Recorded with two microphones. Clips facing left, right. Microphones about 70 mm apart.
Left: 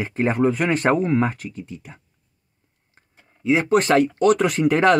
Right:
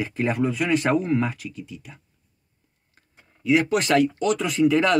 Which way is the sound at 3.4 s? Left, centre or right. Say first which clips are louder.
Left 3 dB; left.